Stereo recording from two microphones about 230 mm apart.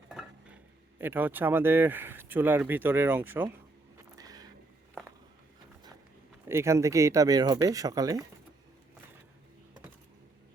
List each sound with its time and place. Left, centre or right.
0.1 s speech: centre
3.9 s a sound: centre
6.5 s speech: centre